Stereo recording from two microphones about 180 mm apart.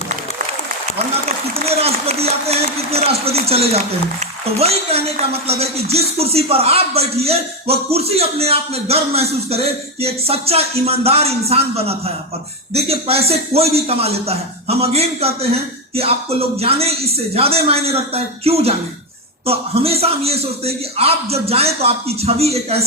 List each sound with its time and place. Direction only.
1.6 s speech: 35° right (ahead or behind)